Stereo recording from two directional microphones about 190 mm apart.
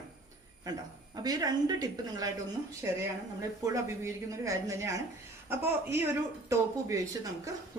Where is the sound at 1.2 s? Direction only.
20° right (ahead or behind).